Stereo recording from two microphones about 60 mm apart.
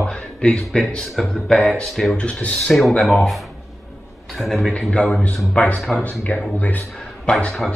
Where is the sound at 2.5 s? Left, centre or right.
Centre.